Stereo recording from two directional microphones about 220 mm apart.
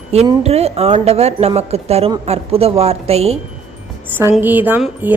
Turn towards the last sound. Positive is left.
turn(degrees=-10)  # may be behind; listen again after turning